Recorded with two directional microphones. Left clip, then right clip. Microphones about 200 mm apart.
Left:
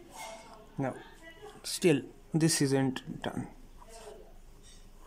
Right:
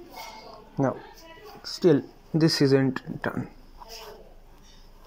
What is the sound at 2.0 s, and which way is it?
Speech, 30° left (ahead or behind).